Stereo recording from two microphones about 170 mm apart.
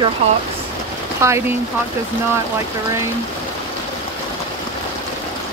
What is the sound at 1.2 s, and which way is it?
Speech, 15° right (ahead or behind).